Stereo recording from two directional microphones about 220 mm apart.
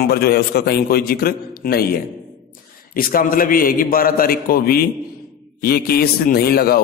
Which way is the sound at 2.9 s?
40° left (ahead or behind).